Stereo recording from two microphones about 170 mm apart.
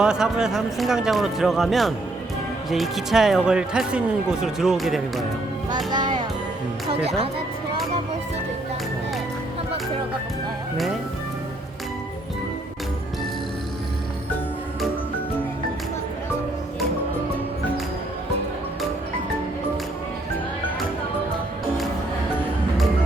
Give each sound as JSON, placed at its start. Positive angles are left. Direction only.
{"t": 0.0, "sound": "speech", "side_deg": -5}
{"t": 5.7, "sound": "speech", "side_deg": -25}